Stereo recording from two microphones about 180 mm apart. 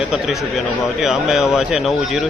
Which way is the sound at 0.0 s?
Centre (ahead or behind).